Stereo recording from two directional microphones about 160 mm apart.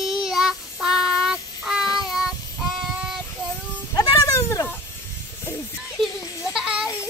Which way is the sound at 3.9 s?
20° left (ahead or behind).